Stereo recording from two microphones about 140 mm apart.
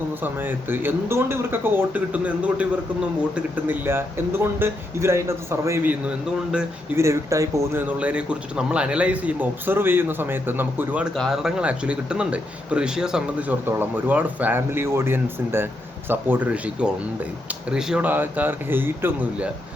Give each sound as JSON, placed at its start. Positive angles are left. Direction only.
{"t": 0.2, "sound": "speech", "side_deg": -15}
{"t": 6.9, "sound": "speech", "side_deg": -20}
{"t": 11.1, "sound": "speech", "side_deg": 0}